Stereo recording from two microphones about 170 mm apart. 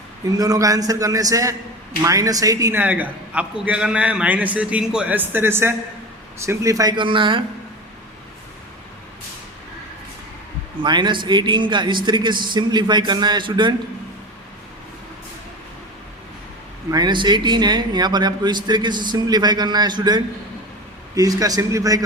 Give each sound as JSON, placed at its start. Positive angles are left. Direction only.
{"t": 0.3, "sound": "a man's voice", "side_deg": -20}
{"t": 10.8, "sound": "a man's voice", "side_deg": -25}
{"t": 16.9, "sound": "a man's voice", "side_deg": -25}